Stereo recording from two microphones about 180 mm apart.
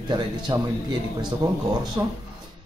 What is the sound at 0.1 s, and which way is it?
A man's voice, 25° right (ahead or behind).